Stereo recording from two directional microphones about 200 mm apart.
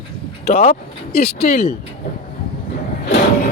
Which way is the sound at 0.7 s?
50° left (ahead or behind).